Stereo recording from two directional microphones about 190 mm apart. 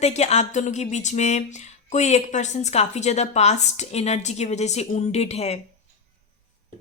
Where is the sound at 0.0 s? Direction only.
35° left (ahead or behind).